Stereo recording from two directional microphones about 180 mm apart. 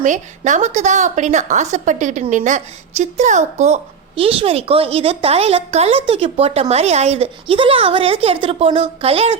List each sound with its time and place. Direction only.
0.0 s a woman's voice: 45° right (ahead or behind)